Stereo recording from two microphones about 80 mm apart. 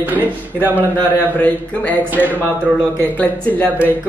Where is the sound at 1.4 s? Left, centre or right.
Centre.